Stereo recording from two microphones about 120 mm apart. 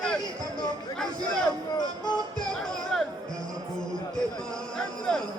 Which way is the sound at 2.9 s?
5° left (ahead or behind).